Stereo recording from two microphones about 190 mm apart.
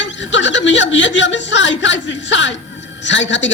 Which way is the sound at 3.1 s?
70° left (ahead or behind).